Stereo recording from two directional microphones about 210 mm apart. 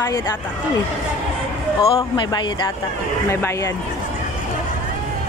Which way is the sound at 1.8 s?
25° left (ahead or behind).